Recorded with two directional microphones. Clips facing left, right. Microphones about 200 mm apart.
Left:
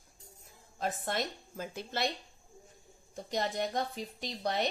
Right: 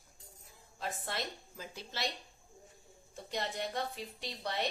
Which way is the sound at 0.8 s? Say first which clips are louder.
Left 5 dB; 45° left (ahead or behind).